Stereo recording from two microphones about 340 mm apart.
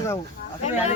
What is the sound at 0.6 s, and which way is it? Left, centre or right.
Speech, centre.